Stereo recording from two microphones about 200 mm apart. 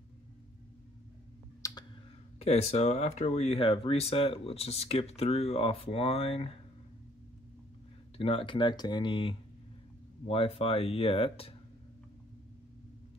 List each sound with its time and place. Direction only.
1.6 s clicking: 15° left (ahead or behind)
2.3 s speech: 30° left (ahead or behind)
8.2 s speech: 25° left (ahead or behind)